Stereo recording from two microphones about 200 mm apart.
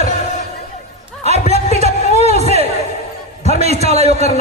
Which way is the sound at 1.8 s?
30° right (ahead or behind).